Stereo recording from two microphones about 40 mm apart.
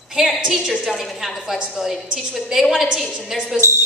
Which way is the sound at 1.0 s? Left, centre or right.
Centre.